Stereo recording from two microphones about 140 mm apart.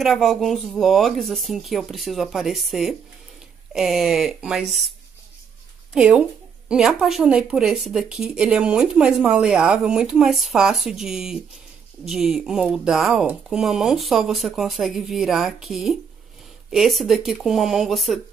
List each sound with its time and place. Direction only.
0.0 s speech: centre (ahead or behind)
5.9 s speech: 10° right (ahead or behind)